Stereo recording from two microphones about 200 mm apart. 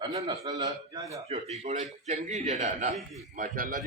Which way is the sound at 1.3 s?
35° right (ahead or behind).